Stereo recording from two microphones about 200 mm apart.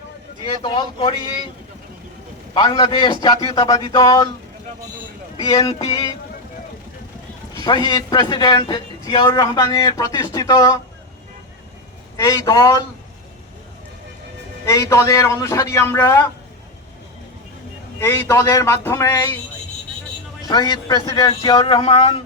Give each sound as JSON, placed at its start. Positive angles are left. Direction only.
{"t": 0.4, "sound": "a man's voice", "side_deg": 25}
{"t": 2.6, "sound": "a man's voice", "side_deg": 20}
{"t": 5.4, "sound": "a man's voice", "side_deg": 30}
{"t": 7.6, "sound": "a man's voice", "side_deg": 20}
{"t": 12.1, "sound": "a man's voice", "side_deg": 15}
{"t": 14.7, "sound": "a man's voice", "side_deg": 15}
{"t": 18.0, "sound": "a man's voice", "side_deg": 15}
{"t": 20.5, "sound": "a man's voice", "side_deg": 20}